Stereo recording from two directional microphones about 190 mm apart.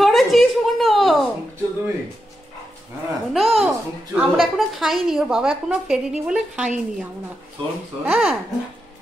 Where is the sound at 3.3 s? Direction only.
Centre (ahead or behind).